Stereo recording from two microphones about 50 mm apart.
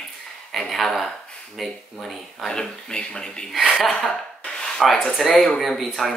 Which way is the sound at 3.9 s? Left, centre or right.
Centre.